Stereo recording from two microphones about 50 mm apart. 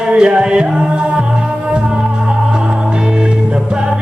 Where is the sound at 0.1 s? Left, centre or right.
Centre.